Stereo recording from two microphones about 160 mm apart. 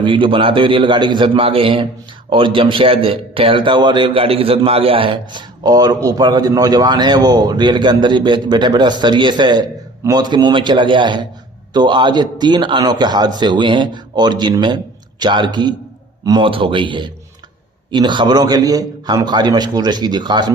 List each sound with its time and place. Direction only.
0.0 s a man's voice: 30° right (ahead or behind)